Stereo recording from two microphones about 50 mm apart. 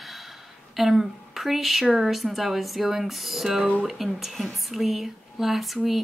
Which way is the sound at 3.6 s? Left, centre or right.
Right.